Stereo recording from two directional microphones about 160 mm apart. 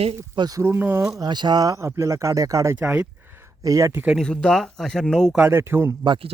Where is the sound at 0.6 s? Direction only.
15° right (ahead or behind).